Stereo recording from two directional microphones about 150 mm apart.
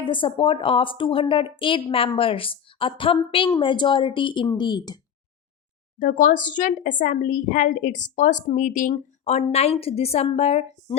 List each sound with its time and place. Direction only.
0.0 s a woman's voice: 35° left (ahead or behind)
6.0 s a woman's voice: 60° left (ahead or behind); by 10.9 s 45° left (ahead or behind)